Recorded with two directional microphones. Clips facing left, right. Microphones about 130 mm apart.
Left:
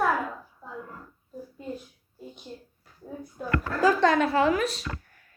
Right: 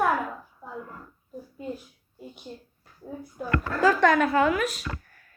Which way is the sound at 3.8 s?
25° left (ahead or behind).